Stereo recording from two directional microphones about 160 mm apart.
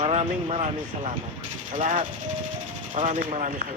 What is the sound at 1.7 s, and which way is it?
Speech, 55° right (ahead or behind).